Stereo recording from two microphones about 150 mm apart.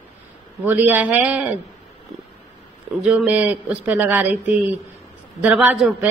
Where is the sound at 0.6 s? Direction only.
10° right (ahead or behind).